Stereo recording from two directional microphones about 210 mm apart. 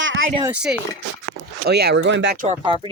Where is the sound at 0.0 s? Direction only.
65° right (ahead or behind).